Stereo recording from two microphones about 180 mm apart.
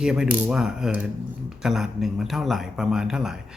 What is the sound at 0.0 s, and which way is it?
Speech, 5° right (ahead or behind).